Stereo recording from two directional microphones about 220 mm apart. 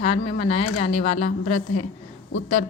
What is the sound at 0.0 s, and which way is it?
A woman's voice, 30° left (ahead or behind).